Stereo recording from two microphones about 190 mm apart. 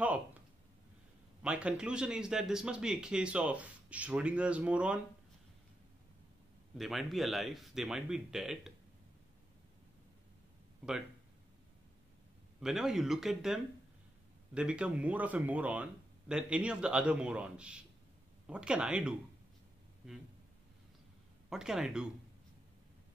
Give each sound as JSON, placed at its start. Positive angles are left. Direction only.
{"t": 1.4, "sound": "speech", "side_deg": -5}
{"t": 6.8, "sound": "speech", "side_deg": 0}
{"t": 12.5, "sound": "speech", "side_deg": 0}
{"t": 21.5, "sound": "speech", "side_deg": -5}